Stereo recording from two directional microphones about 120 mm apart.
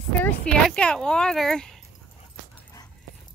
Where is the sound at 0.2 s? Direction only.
15° left (ahead or behind).